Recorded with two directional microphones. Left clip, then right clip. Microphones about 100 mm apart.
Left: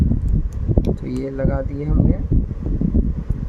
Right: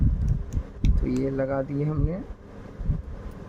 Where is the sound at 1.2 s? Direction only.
10° left (ahead or behind).